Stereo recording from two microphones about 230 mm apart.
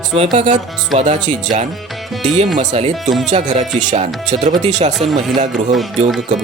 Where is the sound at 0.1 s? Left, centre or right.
Right.